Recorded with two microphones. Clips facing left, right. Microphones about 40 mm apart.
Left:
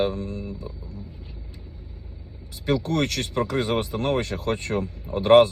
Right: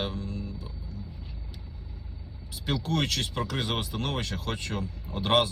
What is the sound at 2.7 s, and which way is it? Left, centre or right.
Speech, left.